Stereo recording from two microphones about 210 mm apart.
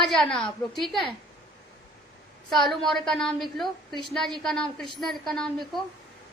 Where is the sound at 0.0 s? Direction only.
Centre (ahead or behind).